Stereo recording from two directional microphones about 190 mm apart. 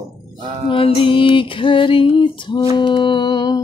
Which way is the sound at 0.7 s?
30° left (ahead or behind).